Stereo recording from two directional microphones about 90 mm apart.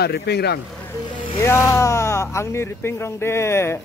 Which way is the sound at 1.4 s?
30° left (ahead or behind).